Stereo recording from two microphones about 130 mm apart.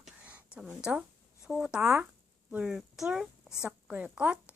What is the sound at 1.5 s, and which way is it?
A woman's voice, 5° right (ahead or behind).